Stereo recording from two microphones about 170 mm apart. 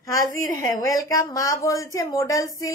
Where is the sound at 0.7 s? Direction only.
20° left (ahead or behind).